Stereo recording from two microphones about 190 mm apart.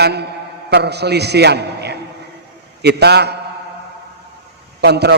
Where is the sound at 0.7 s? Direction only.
60° right (ahead or behind).